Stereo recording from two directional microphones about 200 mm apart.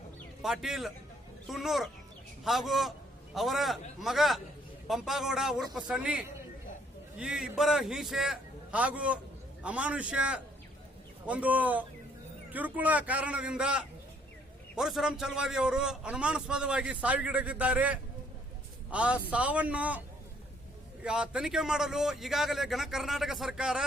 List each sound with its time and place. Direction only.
0.4 s a man's voice: centre (ahead or behind)
21.0 s a man's voice: 5° right (ahead or behind)